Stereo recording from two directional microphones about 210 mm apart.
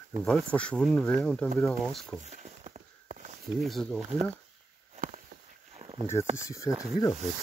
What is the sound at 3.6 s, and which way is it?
Speech, centre (ahead or behind).